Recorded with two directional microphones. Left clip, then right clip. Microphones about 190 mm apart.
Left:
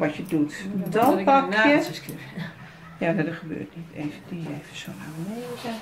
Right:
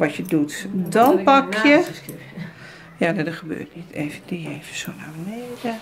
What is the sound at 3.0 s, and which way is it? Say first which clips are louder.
Speech: right 3 dB; 55° right (ahead or behind).